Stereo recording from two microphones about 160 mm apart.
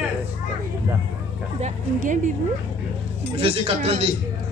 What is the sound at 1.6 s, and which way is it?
Speech, 55° right (ahead or behind).